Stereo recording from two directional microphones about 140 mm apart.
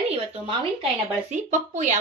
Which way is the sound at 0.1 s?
40° right (ahead or behind).